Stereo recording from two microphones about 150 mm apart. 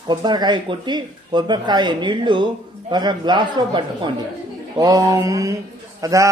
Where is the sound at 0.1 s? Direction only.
30° right (ahead or behind).